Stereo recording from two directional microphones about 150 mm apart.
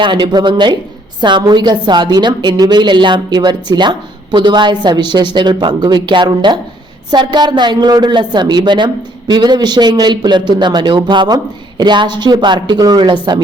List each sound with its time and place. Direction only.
0.0 s a woman's voice: 30° right (ahead or behind)